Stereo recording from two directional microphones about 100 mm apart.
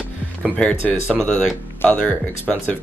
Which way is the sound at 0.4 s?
15° left (ahead or behind).